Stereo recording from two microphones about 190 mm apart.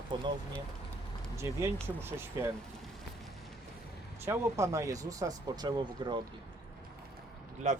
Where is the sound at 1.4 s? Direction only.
15° right (ahead or behind).